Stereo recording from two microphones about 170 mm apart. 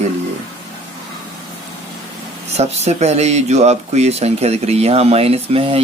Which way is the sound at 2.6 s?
40° right (ahead or behind).